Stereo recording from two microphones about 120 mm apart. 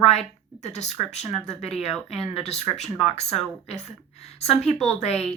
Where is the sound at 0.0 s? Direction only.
60° left (ahead or behind).